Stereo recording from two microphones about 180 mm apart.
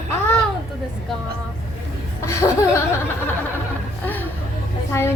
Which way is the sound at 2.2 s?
15° left (ahead or behind).